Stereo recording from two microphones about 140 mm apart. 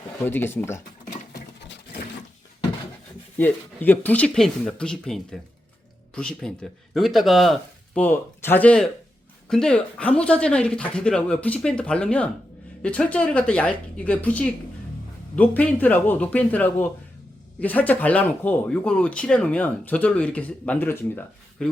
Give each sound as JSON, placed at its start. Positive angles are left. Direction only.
{"t": 0.3, "sound": "speech", "side_deg": 15}
{"t": 3.3, "sound": "speech", "side_deg": 10}
{"t": 8.0, "sound": "speech", "side_deg": 15}